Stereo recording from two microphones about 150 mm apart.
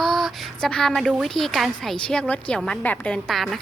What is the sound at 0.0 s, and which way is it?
A woman's voice, centre (ahead or behind).